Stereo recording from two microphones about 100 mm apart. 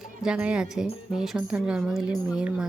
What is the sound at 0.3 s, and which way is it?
Speech, 10° right (ahead or behind).